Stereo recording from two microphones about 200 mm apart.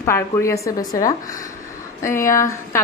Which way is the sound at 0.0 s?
15° left (ahead or behind).